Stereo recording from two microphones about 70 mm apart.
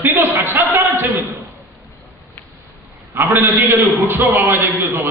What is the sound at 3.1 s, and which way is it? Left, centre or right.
A man's voice, right.